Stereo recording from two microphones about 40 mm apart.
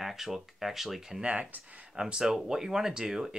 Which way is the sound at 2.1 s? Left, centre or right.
Centre.